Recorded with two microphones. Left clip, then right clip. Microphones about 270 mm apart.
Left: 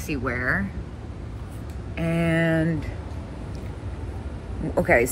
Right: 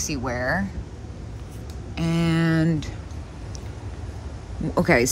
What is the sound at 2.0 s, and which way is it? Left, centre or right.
Speech, centre.